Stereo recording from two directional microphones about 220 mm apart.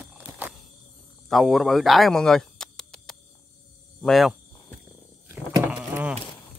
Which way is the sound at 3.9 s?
Centre (ahead or behind).